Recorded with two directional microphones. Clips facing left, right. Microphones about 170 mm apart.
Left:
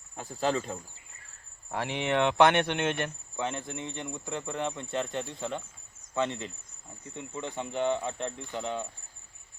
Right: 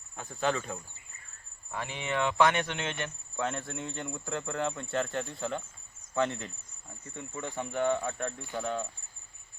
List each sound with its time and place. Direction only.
0.2 s speech: 35° left (ahead or behind)
1.7 s speech: 75° left (ahead or behind); by 3.1 s 55° left (ahead or behind)
3.3 s speech: 15° left (ahead or behind)